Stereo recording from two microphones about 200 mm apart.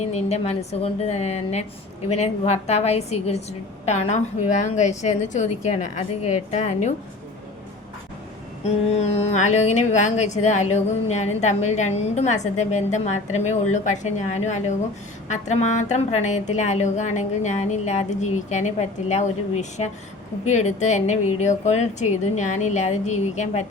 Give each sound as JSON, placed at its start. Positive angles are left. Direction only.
{"t": 0.0, "sound": "speech", "side_deg": 30}
{"t": 8.6, "sound": "speech", "side_deg": 30}